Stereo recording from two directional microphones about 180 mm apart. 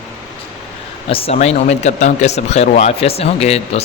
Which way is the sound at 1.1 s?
35° left (ahead or behind).